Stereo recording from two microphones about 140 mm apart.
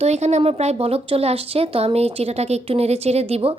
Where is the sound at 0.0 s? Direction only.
55° right (ahead or behind).